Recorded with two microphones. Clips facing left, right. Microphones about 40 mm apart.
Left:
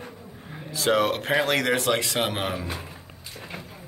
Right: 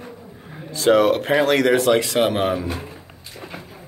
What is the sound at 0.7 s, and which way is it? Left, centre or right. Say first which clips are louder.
Speech: right 7 dB; centre.